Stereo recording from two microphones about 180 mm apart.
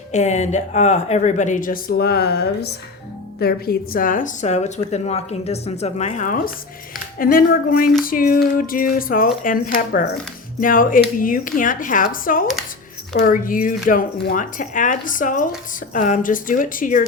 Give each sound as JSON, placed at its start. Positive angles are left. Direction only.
{"t": 0.1, "sound": "speech", "side_deg": 40}
{"t": 3.4, "sound": "a woman's voice", "side_deg": 55}